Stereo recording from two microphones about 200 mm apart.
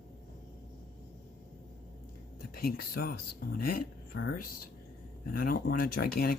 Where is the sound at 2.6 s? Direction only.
50° left (ahead or behind).